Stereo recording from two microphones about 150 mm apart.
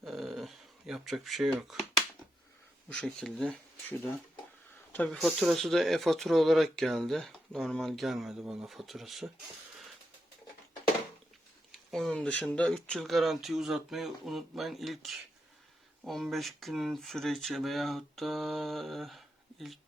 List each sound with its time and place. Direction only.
0.0 s a sound: centre (ahead or behind)
1.5 s speech: centre (ahead or behind)
2.9 s speech: 5° left (ahead or behind)
11.7 s speech: centre (ahead or behind)